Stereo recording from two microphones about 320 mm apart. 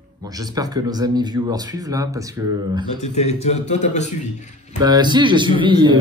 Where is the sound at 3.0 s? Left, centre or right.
Centre.